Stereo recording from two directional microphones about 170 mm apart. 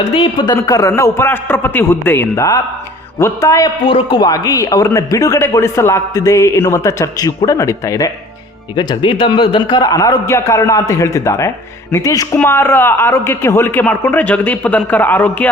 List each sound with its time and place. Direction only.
0.1 s speech: 25° left (ahead or behind)
3.8 s a man's voice: 30° left (ahead or behind); by 15.4 s 10° left (ahead or behind)